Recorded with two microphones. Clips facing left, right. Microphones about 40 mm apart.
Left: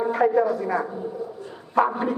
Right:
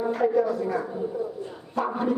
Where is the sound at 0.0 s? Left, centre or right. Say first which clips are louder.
Left 3 dB; left.